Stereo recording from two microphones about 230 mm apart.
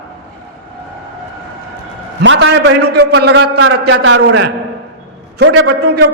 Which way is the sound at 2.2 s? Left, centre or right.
Right.